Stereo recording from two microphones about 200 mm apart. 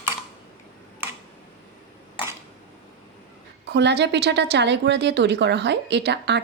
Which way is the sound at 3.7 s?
60° right (ahead or behind).